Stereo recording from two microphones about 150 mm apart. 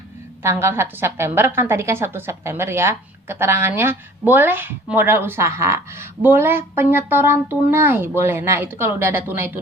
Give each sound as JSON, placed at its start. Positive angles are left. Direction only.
{"t": 0.4, "sound": "a woman's voice", "side_deg": -15}